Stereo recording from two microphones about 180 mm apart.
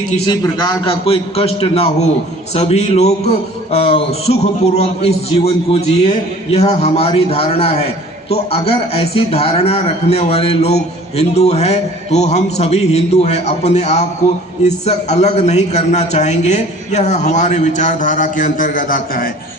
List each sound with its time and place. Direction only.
0.3 s a man's voice: 25° left (ahead or behind); by 19.3 s 50° left (ahead or behind)